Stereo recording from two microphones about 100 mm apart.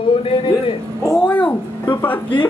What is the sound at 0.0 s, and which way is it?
Speech, 65° left (ahead or behind).